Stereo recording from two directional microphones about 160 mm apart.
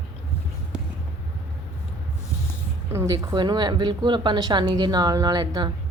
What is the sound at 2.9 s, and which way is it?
Speech, 20° right (ahead or behind).